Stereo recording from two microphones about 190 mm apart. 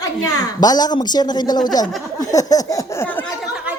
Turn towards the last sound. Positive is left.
turn(degrees=10)  # may be behind; listen again after turning